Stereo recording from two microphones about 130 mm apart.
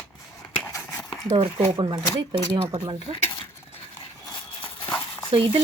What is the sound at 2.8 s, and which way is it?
Speech, 45° right (ahead or behind).